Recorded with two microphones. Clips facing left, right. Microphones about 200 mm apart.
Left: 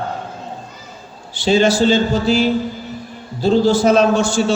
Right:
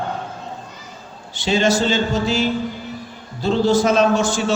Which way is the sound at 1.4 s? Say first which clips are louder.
Left 4 dB; 35° left (ahead or behind).